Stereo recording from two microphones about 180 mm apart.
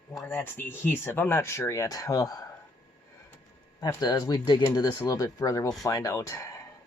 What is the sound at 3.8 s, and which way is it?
Speech, 20° left (ahead or behind).